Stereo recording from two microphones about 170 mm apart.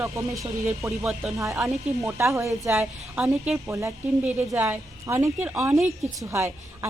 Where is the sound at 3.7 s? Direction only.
20° right (ahead or behind).